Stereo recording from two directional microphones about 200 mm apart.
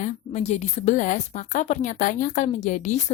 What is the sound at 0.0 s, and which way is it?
A woman's voice, 35° left (ahead or behind).